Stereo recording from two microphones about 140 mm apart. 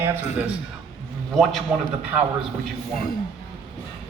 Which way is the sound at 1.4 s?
Centre (ahead or behind).